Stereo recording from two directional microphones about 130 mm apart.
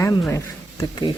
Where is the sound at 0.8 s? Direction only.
35° left (ahead or behind).